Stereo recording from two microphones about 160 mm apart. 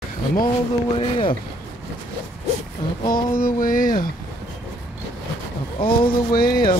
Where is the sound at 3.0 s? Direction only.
60° left (ahead or behind).